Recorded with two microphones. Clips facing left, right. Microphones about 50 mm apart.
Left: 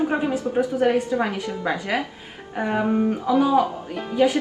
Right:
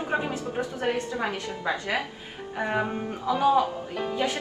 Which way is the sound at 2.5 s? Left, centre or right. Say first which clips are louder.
Left 4 dB; centre.